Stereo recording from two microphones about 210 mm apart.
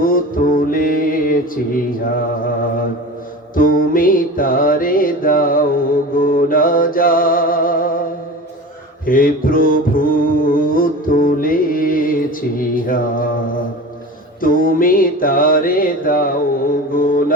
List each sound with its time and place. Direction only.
0.0 s mantra: 40° left (ahead or behind)
3.5 s mantra: 40° left (ahead or behind)
9.0 s music: 40° left (ahead or behind)
14.4 s mantra: 40° left (ahead or behind)